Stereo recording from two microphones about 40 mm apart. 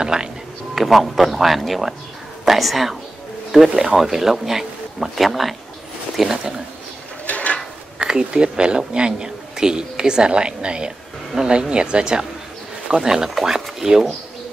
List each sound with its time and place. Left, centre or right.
0.0 s speech: centre
0.7 s a woman's voice: centre
7.2 s drawer open or close: left
8.0 s speech: right